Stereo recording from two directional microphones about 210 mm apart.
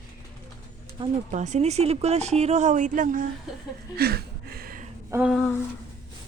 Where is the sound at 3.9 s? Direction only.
50° right (ahead or behind).